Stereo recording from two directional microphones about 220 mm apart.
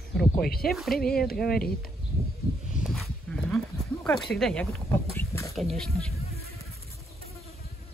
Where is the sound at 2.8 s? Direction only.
Centre (ahead or behind).